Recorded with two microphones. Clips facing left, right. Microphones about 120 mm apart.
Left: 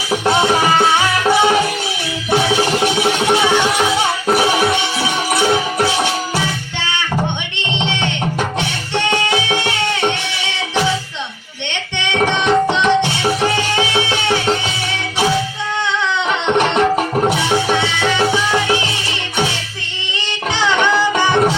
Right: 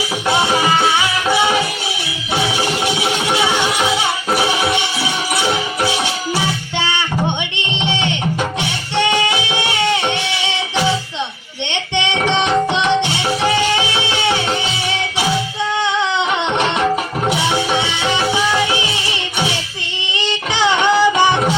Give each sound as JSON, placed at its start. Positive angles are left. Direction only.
{"t": 0.8, "sound": "music", "side_deg": 45}
{"t": 7.9, "sound": "music", "side_deg": -15}
{"t": 17.5, "sound": "music", "side_deg": -15}
{"t": 20.1, "sound": "music", "side_deg": -15}